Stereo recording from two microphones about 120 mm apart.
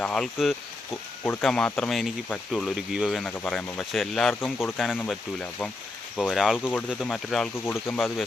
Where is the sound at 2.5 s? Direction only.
5° right (ahead or behind).